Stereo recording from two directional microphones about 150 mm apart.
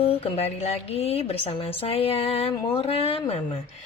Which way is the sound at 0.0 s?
40° left (ahead or behind).